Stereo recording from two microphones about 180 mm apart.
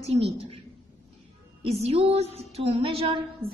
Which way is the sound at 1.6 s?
35° right (ahead or behind).